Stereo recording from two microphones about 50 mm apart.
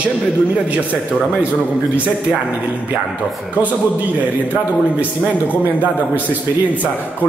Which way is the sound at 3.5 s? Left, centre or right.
Right.